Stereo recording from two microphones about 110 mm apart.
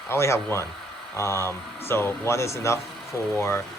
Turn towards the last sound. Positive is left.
turn(degrees=25)  # may be behind; listen again after turning